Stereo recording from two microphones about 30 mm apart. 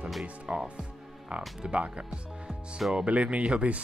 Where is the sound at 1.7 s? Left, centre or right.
Right.